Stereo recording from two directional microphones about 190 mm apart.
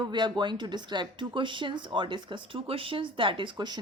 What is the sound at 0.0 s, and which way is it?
Speech, 25° right (ahead or behind).